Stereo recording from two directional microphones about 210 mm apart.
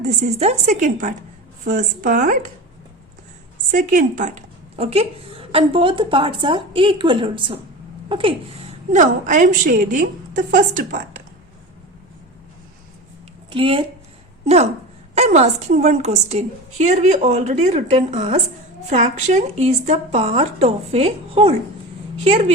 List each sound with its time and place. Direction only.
0.0 s a woman's voice: 30° right (ahead or behind)
3.7 s speech: 40° right (ahead or behind)
8.9 s a woman's voice: 35° right (ahead or behind)
13.5 s a woman's voice: 25° right (ahead or behind)